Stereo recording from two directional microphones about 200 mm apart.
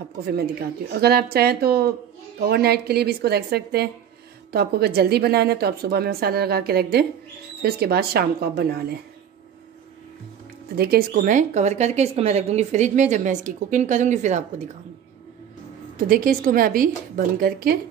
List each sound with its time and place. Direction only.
0.2 s a woman's voice: 50° right (ahead or behind)
10.8 s a woman's voice: 50° right (ahead or behind)
16.1 s a woman's voice: 45° right (ahead or behind)